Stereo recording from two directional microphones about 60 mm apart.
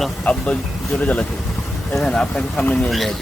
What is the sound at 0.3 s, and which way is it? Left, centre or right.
Speech, left.